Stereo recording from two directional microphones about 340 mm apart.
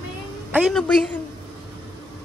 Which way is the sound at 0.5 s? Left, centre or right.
Centre.